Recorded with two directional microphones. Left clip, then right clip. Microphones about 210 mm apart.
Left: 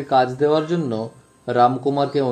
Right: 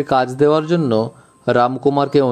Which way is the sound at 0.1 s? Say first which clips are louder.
Right 2 dB; 35° right (ahead or behind).